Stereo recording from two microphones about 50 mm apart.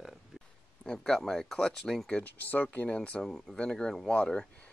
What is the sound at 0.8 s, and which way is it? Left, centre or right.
Speech, centre.